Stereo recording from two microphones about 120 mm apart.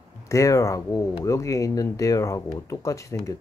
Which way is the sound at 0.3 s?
25° left (ahead or behind).